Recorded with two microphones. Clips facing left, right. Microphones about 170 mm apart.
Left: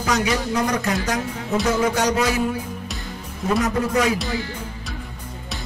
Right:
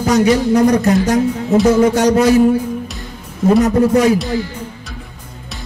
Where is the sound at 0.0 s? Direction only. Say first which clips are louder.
Right 9 dB; 45° right (ahead or behind).